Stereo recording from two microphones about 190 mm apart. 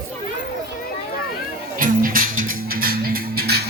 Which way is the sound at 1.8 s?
45° right (ahead or behind).